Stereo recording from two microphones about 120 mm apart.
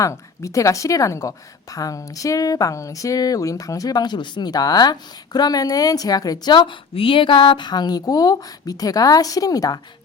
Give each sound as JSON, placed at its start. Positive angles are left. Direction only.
{"t": 0.0, "sound": "a woman's voice", "side_deg": 25}